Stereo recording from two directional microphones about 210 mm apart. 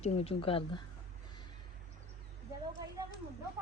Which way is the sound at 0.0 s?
25° left (ahead or behind).